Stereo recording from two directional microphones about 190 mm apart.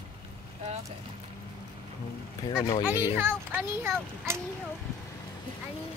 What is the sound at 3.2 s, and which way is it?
A child's voice, 10° right (ahead or behind).